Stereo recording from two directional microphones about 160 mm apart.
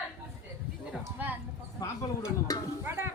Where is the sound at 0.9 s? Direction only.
10° right (ahead or behind).